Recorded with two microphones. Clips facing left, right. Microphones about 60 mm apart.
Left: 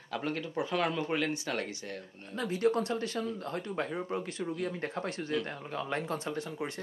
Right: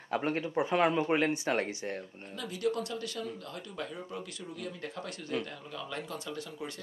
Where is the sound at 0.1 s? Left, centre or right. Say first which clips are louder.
Right 3 dB; right.